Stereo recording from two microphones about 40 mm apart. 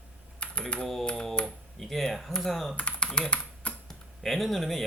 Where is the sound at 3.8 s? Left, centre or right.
Centre.